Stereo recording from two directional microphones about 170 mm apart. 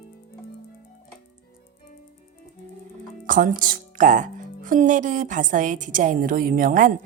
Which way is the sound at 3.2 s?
50° right (ahead or behind).